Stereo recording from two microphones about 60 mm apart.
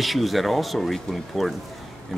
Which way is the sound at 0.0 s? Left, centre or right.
Centre.